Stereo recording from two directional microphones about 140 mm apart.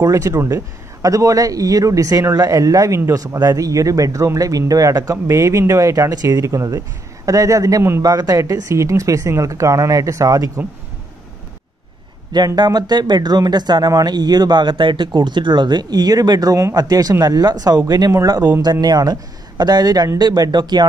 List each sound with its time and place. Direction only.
0.0 s speech: 20° right (ahead or behind)
12.3 s speech: 30° right (ahead or behind)